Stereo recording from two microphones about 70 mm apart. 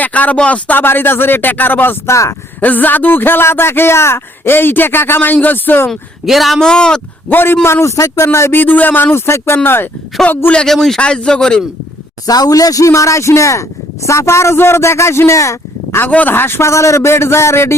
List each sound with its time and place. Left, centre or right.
0.0 s speech: left
2.0 s speech: left
2.6 s a man's voice: left
5.9 s speech: centre
6.7 s speech: centre
7.3 s a man's voice: left
8.6 s a man's voice: left
10.2 s speech: centre
10.7 s speech: centre
12.2 s a man's voice: left
16.0 s a man's voice: left